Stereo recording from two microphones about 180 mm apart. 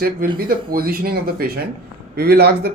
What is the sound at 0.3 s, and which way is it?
Speech, 55° right (ahead or behind).